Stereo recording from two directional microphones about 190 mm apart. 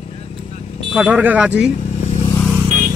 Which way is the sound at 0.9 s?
5° right (ahead or behind).